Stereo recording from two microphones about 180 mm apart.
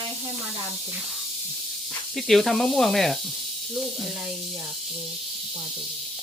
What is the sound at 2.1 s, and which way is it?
Speech, centre (ahead or behind).